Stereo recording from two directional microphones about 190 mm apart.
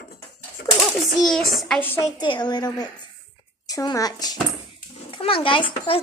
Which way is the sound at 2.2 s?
25° left (ahead or behind).